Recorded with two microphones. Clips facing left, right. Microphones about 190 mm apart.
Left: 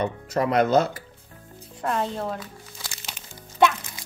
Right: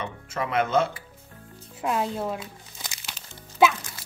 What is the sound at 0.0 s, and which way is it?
Speech, 40° left (ahead or behind).